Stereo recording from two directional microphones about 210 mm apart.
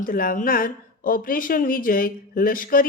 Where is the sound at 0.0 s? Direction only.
40° left (ahead or behind).